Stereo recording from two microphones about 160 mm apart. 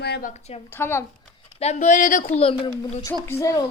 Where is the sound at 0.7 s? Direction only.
15° left (ahead or behind).